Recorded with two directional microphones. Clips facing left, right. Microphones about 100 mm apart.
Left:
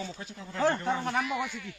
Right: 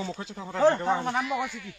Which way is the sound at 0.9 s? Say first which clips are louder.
Right 3 dB; 20° right (ahead or behind).